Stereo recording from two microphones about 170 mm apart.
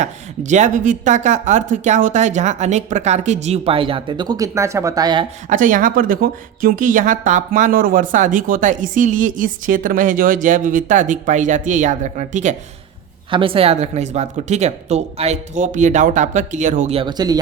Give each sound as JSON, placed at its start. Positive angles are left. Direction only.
{"t": 0.0, "sound": "a woman's voice", "side_deg": -45}
{"t": 5.5, "sound": "a woman's voice", "side_deg": -50}
{"t": 13.3, "sound": "a woman's voice", "side_deg": -30}
{"t": 17.0, "sound": "speech", "side_deg": -25}